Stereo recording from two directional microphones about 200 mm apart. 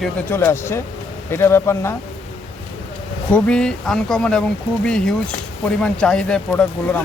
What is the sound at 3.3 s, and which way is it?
Speech, 5° left (ahead or behind).